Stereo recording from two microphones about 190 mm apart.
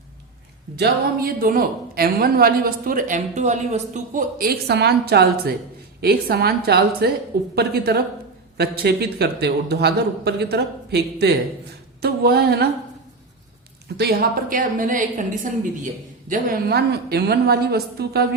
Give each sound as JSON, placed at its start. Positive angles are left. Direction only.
{"t": 0.8, "sound": "a woman's voice", "side_deg": -50}
{"t": 13.9, "sound": "a woman's voice", "side_deg": -55}
{"t": 16.3, "sound": "a man's voice", "side_deg": -50}